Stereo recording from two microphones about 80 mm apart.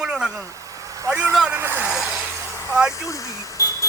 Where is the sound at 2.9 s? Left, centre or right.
Left.